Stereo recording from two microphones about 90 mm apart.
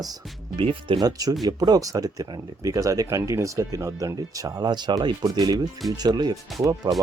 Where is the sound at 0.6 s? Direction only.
75° right (ahead or behind).